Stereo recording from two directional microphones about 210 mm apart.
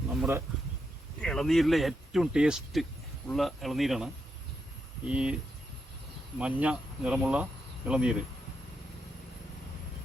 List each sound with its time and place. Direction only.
0.2 s insect: 10° right (ahead or behind)
1.2 s speech: 5° left (ahead or behind)
6.4 s speech: 5° right (ahead or behind)